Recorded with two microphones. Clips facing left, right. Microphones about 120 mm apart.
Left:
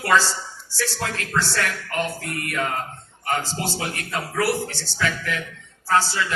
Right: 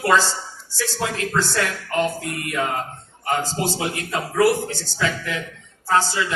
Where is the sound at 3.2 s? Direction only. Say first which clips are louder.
Right 3 dB; 20° right (ahead or behind).